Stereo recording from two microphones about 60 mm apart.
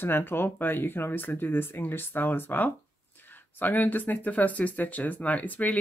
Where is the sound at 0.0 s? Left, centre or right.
Left.